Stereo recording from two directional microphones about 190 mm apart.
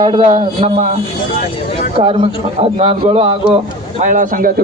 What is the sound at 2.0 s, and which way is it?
A man's voice, 30° right (ahead or behind).